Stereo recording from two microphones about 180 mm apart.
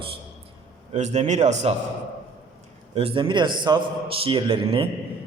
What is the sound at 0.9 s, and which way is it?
Speech, 40° right (ahead or behind).